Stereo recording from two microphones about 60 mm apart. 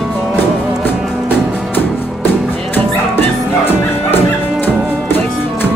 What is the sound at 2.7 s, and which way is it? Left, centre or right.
Music, left.